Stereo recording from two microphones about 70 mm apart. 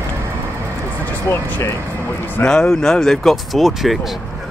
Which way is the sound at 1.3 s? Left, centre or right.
Left.